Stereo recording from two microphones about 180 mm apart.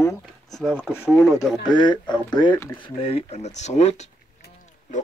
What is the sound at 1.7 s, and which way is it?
Speech, 25° left (ahead or behind).